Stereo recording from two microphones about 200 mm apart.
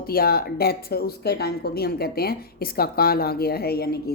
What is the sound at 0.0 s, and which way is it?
Speech, 50° left (ahead or behind).